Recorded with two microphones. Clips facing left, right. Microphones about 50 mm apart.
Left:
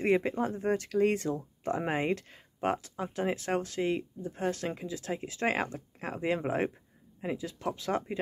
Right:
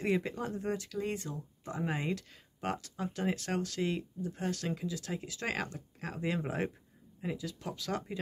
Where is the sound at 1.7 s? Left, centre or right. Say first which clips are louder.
Left 5 dB; left.